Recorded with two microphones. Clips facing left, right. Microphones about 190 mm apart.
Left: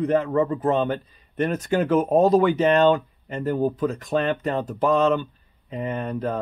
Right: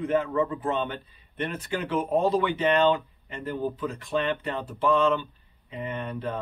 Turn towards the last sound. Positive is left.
turn(degrees=45)  # may be behind; listen again after turning